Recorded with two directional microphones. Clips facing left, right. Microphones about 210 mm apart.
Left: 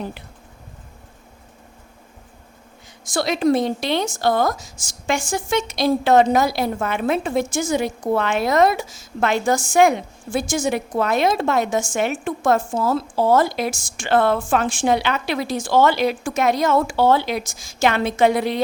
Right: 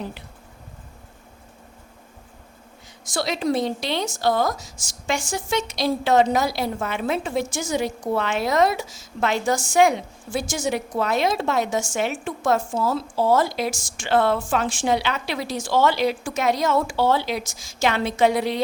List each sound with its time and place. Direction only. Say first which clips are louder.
3.1 s a woman's voice: left 5 dB; 55° left (ahead or behind)